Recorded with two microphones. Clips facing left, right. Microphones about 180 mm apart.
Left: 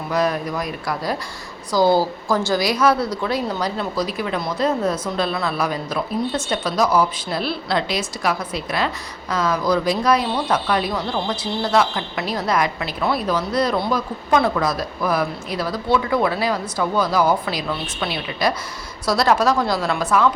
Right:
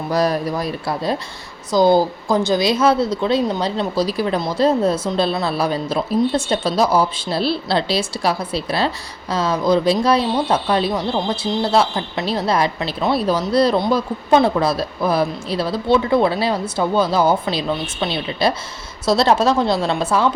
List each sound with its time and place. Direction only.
0.1 s speech: 35° right (ahead or behind)